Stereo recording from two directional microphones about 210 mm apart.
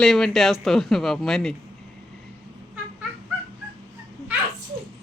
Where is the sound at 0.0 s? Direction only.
Centre (ahead or behind).